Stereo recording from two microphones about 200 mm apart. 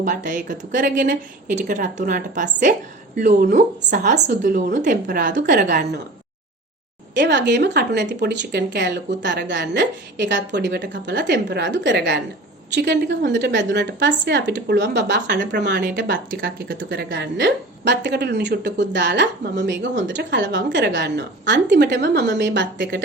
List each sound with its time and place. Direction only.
0.0 s a woman's voice: 40° right (ahead or behind)
7.1 s a woman's voice: 60° right (ahead or behind)
16.6 s a woman's voice: 60° right (ahead or behind)